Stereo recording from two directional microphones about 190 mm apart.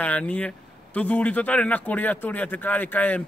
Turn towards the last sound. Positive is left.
turn(degrees=10)  # may be behind; listen again after turning